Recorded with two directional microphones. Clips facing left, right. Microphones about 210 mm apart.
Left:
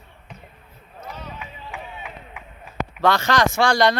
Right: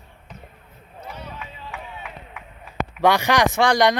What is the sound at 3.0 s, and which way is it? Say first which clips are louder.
Speech: right 1 dB; 15° right (ahead or behind).